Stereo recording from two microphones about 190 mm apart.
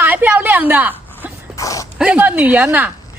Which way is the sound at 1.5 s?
15° left (ahead or behind).